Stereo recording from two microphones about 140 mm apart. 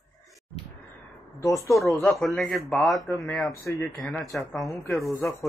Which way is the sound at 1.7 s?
Centre (ahead or behind).